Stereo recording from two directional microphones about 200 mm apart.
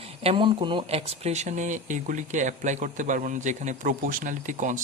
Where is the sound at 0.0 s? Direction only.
30° right (ahead or behind).